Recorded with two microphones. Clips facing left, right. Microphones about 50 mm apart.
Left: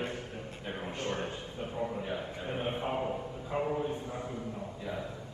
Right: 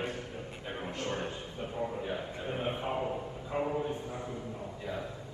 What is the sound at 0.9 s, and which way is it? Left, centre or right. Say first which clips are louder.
Speech: even; left.